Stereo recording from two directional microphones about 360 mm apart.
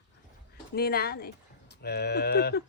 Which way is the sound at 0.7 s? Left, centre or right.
Left.